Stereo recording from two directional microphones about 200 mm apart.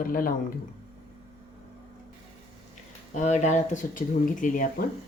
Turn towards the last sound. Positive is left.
turn(degrees=40)  # may be behind; listen again after turning